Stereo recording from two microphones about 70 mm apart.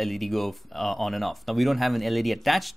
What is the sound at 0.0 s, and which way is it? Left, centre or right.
Speech, centre.